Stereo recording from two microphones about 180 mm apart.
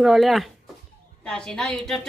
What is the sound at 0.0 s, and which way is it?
Music, centre (ahead or behind).